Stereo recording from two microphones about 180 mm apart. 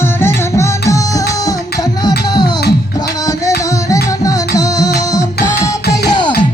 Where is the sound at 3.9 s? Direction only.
20° left (ahead or behind).